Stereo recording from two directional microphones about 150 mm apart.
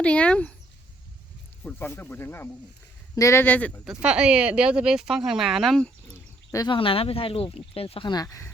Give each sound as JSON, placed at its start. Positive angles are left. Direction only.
{"t": 0.0, "sound": "speech", "side_deg": 10}
{"t": 1.6, "sound": "speech", "side_deg": 15}
{"t": 3.8, "sound": "speech", "side_deg": -5}
{"t": 6.5, "sound": "speech", "side_deg": 25}
{"t": 6.7, "sound": "speech", "side_deg": 40}